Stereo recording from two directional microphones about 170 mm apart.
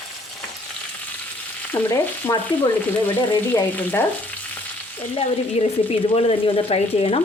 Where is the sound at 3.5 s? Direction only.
10° left (ahead or behind).